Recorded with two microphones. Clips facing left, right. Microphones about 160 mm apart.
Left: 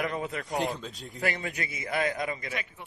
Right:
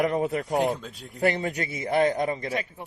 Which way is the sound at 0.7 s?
5° right (ahead or behind).